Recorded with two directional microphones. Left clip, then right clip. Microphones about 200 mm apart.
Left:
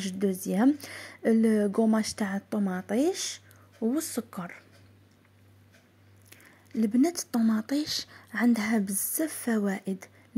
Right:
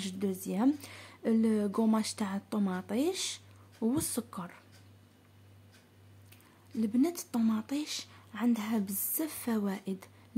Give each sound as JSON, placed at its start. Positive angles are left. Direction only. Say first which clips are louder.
{"t": 0.0, "sound": "speech", "louder": "left 6 dB", "side_deg": 15}
{"t": 6.8, "sound": "speech", "louder": "left 5 dB", "side_deg": 20}